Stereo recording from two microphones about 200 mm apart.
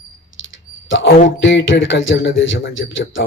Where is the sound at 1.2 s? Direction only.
65° left (ahead or behind).